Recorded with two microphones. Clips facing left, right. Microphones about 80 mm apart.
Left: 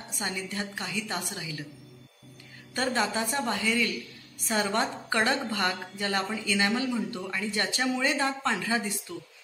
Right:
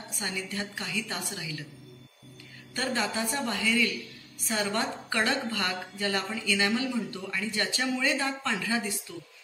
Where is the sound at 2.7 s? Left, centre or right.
Left.